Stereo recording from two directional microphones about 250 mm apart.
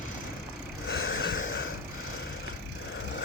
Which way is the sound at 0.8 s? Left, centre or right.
Left.